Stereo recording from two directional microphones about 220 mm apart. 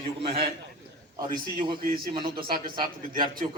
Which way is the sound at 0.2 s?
25° right (ahead or behind).